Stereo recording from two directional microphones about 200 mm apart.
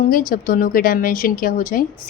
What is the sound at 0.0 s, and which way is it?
A woman's voice, 45° left (ahead or behind).